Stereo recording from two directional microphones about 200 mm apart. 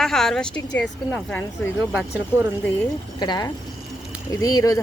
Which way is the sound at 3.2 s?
20° left (ahead or behind).